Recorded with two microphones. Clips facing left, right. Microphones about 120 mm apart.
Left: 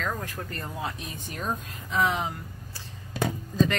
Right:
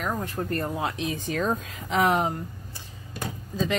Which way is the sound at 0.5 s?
60° right (ahead or behind).